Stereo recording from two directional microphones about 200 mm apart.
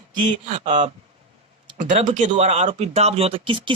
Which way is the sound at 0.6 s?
35° right (ahead or behind).